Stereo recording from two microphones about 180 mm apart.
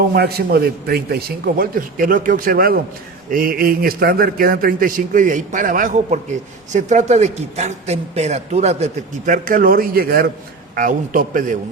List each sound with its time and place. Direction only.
0.0 s a man's voice: 60° right (ahead or behind)